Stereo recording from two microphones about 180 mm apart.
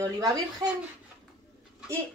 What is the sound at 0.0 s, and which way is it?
Speech, 20° right (ahead or behind).